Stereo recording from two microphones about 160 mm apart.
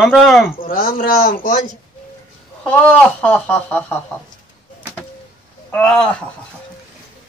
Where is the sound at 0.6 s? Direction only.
65° left (ahead or behind).